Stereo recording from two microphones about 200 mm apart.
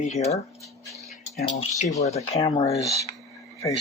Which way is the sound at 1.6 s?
35° left (ahead or behind).